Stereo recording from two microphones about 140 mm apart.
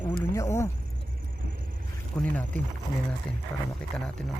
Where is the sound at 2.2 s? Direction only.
10° left (ahead or behind).